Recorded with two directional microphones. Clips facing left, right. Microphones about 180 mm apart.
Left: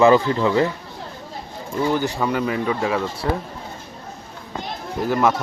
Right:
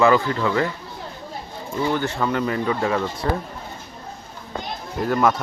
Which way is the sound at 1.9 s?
10° left (ahead or behind).